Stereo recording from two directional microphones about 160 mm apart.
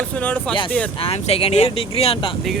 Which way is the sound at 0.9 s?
40° left (ahead or behind).